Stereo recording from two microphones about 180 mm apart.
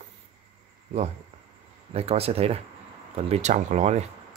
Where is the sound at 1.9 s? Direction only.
35° right (ahead or behind).